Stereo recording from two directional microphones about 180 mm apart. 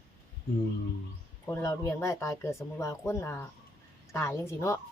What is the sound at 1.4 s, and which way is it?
Speech, 15° left (ahead or behind).